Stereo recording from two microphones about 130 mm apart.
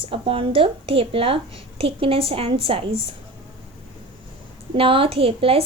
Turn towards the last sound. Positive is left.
turn(degrees=-45)  # may be behind; listen again after turning